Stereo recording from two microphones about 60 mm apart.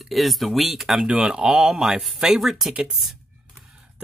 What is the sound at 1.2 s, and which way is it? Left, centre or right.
Music, centre.